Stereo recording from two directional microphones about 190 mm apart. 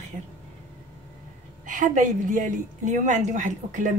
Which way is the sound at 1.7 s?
45° right (ahead or behind).